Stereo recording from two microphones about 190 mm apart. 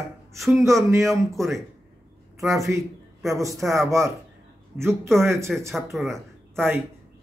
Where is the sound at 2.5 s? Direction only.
15° right (ahead or behind).